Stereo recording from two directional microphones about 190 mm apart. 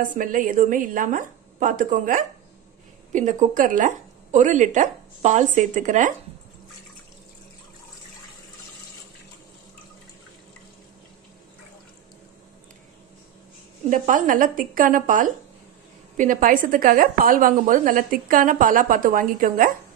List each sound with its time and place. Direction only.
0.0 s a woman's voice: 45° right (ahead or behind)
13.8 s a woman's voice: 45° right (ahead or behind)